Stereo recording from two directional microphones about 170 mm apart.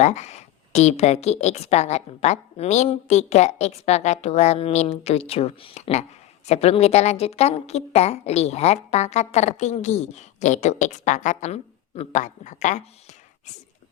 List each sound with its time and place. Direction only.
0.0 s a woman's voice: 40° left (ahead or behind)